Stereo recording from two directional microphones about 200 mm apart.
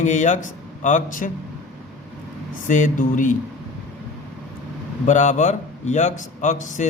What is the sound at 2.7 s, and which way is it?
Speech, 40° left (ahead or behind).